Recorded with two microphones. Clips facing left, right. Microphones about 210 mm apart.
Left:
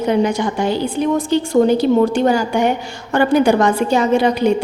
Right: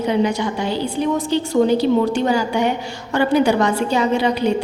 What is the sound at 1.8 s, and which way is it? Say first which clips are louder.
A woman's voice: left 3 dB; 50° left (ahead or behind).